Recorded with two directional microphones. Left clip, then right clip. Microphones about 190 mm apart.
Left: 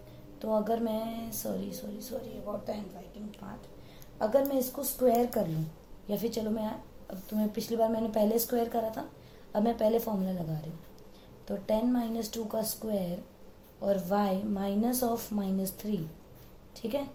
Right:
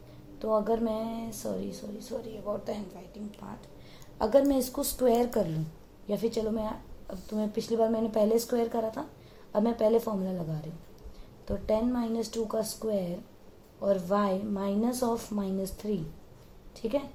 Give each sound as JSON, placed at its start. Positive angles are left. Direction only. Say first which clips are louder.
{"t": 0.3, "sound": "a woman's voice", "louder": "right 2 dB", "side_deg": -35}
{"t": 2.5, "sound": "a woman's voice", "louder": "right 4 dB", "side_deg": -45}
{"t": 4.5, "sound": "a woman's voice", "louder": "right 2 dB", "side_deg": -45}